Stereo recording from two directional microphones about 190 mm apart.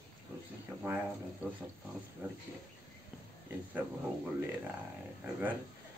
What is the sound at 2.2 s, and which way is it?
Speech, 10° right (ahead or behind).